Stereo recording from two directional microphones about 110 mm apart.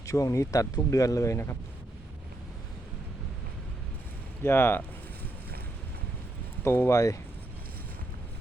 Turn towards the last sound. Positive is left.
turn(degrees=30)  # may be behind; listen again after turning